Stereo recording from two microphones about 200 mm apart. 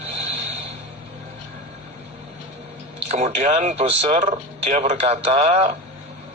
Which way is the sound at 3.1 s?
35° right (ahead or behind).